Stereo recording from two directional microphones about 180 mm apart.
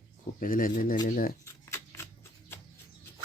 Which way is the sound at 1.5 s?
15° left (ahead or behind).